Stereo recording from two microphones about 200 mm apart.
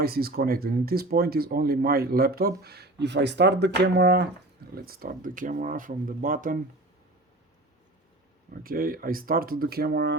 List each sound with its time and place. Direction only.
0.0 s speech: 50° right (ahead or behind)
4.9 s speech: 45° right (ahead or behind)
8.6 s speech: 45° right (ahead or behind)